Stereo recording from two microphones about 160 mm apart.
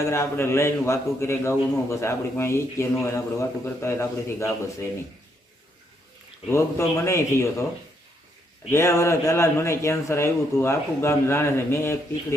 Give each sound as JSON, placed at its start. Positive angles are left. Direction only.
{"t": 0.0, "sound": "a man's voice", "side_deg": 15}
{"t": 6.5, "sound": "a man's voice", "side_deg": 15}
{"t": 8.7, "sound": "a man's voice", "side_deg": 15}